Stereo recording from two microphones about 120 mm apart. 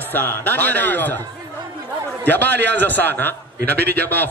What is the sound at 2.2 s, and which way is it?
A man's voice, 15° left (ahead or behind).